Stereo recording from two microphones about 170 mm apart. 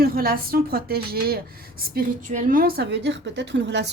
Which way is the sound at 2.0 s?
50° right (ahead or behind).